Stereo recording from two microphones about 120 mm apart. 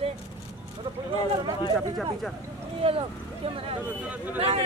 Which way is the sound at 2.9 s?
50° right (ahead or behind).